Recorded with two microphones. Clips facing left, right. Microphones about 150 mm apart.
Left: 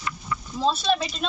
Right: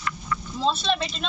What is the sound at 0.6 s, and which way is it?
Speech, 5° left (ahead or behind).